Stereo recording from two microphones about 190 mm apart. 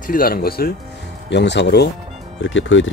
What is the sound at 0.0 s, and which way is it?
Speech, 50° left (ahead or behind).